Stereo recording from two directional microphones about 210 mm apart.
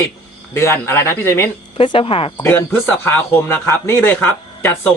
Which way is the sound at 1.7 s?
25° left (ahead or behind).